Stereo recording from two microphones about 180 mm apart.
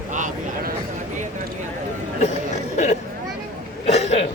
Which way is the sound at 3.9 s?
35° left (ahead or behind).